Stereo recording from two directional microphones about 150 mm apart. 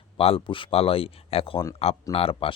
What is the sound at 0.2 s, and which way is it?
Speech, 40° left (ahead or behind).